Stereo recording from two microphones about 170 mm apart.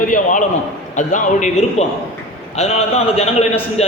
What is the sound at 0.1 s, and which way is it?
A man's voice, 50° left (ahead or behind).